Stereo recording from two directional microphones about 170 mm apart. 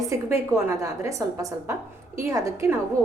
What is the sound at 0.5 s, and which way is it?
A woman's voice, 15° right (ahead or behind).